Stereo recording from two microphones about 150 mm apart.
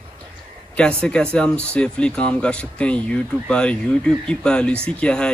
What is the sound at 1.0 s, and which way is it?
A man's voice, 5° left (ahead or behind).